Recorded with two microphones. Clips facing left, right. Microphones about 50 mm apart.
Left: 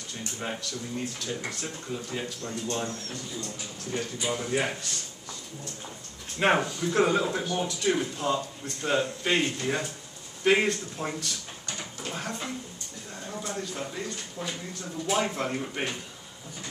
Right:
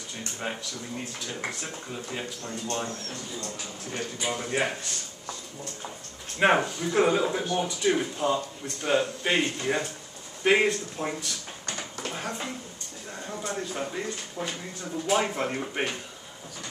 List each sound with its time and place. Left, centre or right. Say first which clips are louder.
0.4 s a man's voice: even; centre
2.9 s speech: even; right
3.9 s a man's voice: left 1 dB; centre
6.4 s a man's voice: right 2 dB; centre
13.5 s a man's voice: right 3 dB; centre
15.5 s speech: right 2 dB; centre